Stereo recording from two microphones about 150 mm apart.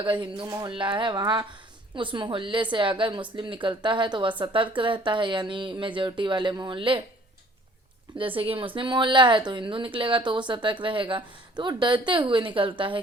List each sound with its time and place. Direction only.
0.0 s a woman's voice: 35° right (ahead or behind)
0.4 s speech: 20° right (ahead or behind)
0.7 s a woman's voice: 35° right (ahead or behind)
8.4 s a woman's voice: 35° right (ahead or behind)